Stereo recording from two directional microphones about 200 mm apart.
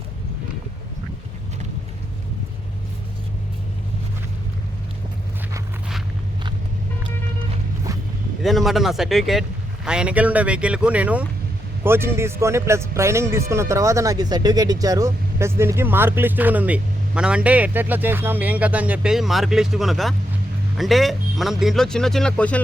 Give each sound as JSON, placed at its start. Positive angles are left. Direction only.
{"t": 7.9, "sound": "vehicle", "side_deg": -15}
{"t": 8.4, "sound": "speech", "side_deg": 0}